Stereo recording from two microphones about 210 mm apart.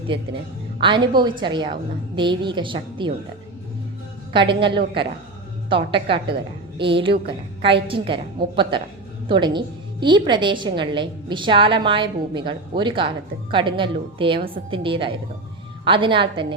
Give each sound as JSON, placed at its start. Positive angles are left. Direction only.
{"t": 0.8, "sound": "a woman's voice", "side_deg": -20}
{"t": 4.3, "sound": "a woman's voice", "side_deg": -25}
{"t": 9.3, "sound": "a woman's voice", "side_deg": -20}